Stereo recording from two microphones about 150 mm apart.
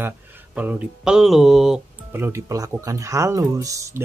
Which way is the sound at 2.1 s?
15° right (ahead or behind).